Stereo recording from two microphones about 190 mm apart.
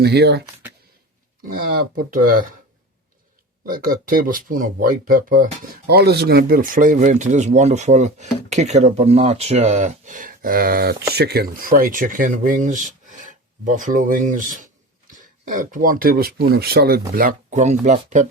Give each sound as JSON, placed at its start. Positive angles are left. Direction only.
{"t": 0.0, "sound": "speech", "side_deg": -60}
{"t": 1.5, "sound": "speech", "side_deg": -50}
{"t": 3.7, "sound": "speech", "side_deg": -45}
{"t": 17.2, "sound": "speech", "side_deg": -45}